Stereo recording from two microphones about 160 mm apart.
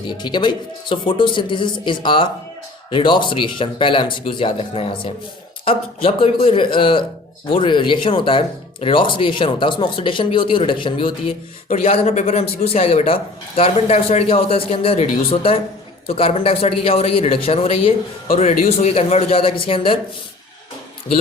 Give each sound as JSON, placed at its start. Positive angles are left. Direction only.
{"t": 0.1, "sound": "speech", "side_deg": 25}
{"t": 11.7, "sound": "speech", "side_deg": 40}